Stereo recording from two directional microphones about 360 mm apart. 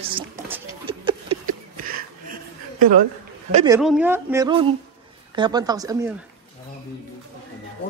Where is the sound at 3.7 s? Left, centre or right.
Centre.